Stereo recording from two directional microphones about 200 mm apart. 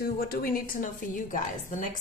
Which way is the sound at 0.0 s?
50° left (ahead or behind).